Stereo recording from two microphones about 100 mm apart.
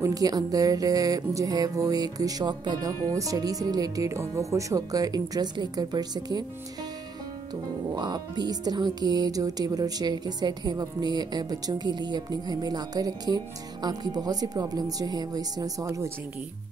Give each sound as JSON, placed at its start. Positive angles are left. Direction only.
{"t": 0.0, "sound": "speech", "side_deg": -40}
{"t": 7.9, "sound": "speech", "side_deg": -45}